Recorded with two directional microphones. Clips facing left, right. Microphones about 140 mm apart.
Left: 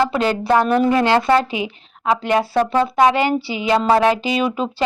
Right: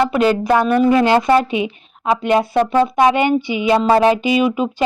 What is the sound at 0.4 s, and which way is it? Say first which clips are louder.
A woman's voice: right 2 dB; 10° right (ahead or behind).